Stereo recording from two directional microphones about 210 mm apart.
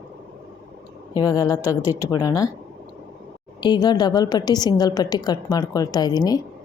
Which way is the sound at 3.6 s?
20° left (ahead or behind).